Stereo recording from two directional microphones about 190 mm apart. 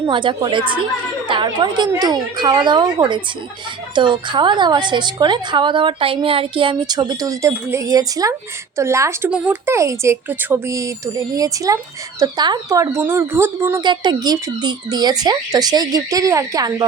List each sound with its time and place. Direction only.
0.0 s speech: 25° right (ahead or behind)